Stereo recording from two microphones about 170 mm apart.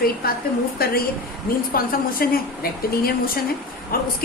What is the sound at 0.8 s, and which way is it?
A woman's voice, 60° left (ahead or behind).